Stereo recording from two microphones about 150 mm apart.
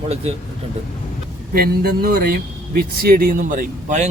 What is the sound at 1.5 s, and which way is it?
Speech, 85° right.